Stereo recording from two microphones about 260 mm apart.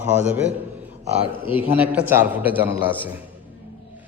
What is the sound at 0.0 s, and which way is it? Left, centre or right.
Speech, centre.